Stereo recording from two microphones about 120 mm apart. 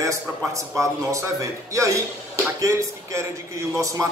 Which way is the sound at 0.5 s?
25° right (ahead or behind).